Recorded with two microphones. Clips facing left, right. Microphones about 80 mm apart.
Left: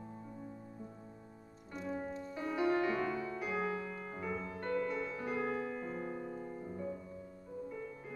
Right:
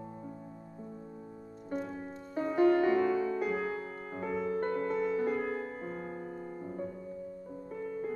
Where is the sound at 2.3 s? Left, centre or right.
Right.